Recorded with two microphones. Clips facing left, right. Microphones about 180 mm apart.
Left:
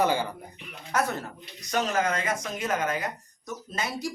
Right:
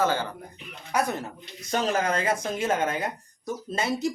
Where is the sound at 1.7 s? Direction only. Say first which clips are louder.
Right 1 dB; 30° right (ahead or behind).